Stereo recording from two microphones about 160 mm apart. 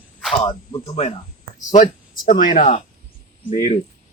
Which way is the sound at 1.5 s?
55° left (ahead or behind).